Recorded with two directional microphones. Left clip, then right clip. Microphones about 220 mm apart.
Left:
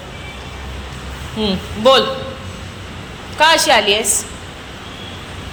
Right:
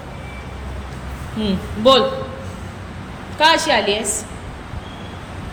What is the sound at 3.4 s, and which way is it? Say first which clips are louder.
Speech: left 3 dB; 5° right (ahead or behind).